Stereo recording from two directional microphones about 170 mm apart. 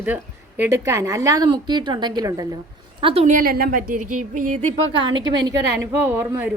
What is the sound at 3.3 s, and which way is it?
Speech, 65° right (ahead or behind).